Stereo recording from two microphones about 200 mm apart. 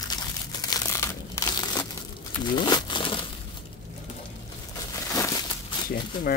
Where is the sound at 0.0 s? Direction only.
20° left (ahead or behind).